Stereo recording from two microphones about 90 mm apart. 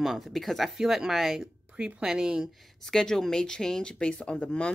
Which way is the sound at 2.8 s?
5° left (ahead or behind).